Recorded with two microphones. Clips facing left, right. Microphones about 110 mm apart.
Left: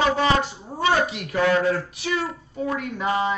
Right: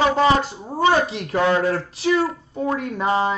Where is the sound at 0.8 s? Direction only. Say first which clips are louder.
Right 3 dB; 30° right (ahead or behind).